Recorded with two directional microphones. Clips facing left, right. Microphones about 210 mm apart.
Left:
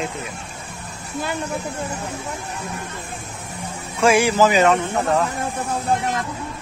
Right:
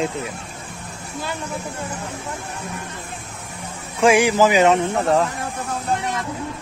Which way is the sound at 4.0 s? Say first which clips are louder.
Right 1 dB; 15° right (ahead or behind).